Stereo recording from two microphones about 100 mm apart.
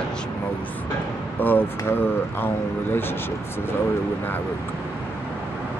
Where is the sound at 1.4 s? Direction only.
20° left (ahead or behind).